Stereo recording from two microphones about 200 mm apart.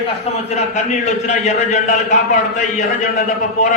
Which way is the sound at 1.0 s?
35° left (ahead or behind).